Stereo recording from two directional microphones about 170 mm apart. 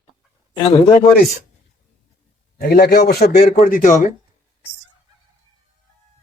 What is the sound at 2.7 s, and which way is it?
Speech, 65° left (ahead or behind).